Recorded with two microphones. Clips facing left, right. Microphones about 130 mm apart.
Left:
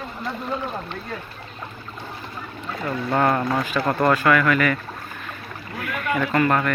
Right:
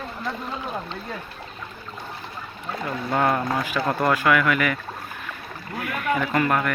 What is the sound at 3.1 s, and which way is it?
Speech, centre (ahead or behind).